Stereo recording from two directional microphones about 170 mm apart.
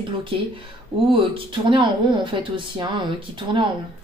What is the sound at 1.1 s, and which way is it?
A woman's voice, 30° right (ahead or behind).